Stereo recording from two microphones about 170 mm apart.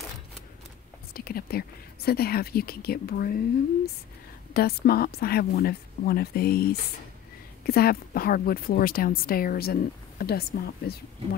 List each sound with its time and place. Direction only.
1.1 s a woman's voice: 60° left (ahead or behind)